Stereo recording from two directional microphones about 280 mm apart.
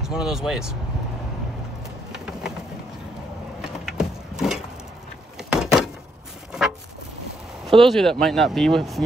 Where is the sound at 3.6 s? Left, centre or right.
Centre.